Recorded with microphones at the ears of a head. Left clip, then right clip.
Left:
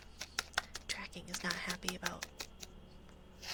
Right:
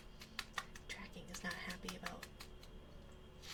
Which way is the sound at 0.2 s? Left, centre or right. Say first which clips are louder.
Left 8 dB; left.